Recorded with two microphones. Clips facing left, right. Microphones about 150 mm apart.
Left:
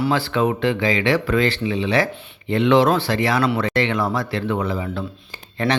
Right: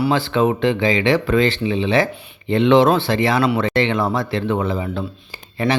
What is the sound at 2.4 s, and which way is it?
Speech, 25° right (ahead or behind).